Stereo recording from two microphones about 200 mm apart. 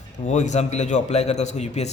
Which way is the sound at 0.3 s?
35° left (ahead or behind).